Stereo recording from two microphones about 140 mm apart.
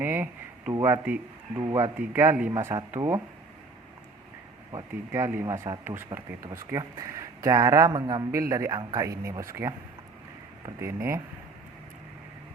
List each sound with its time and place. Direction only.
0.0 s speech: 15° right (ahead or behind)
5.1 s speech: 15° right (ahead or behind)
10.8 s speech: 20° right (ahead or behind)